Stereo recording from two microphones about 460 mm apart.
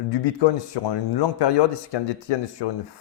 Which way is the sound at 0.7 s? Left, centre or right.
Left.